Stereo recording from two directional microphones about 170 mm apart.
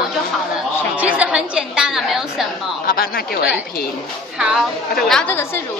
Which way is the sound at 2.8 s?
60° left (ahead or behind).